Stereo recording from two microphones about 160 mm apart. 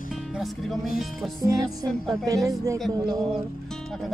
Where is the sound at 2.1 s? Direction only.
20° right (ahead or behind).